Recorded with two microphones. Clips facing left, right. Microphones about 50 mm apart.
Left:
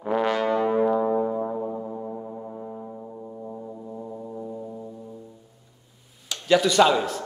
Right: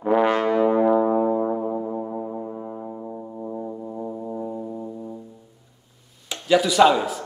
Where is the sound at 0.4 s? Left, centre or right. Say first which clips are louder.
Right 3 dB; right.